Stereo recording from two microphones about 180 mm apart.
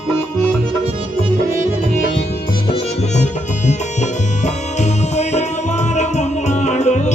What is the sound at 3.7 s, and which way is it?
Music, 40° left (ahead or behind).